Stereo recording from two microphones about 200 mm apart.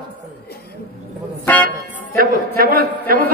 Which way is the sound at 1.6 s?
45° right (ahead or behind).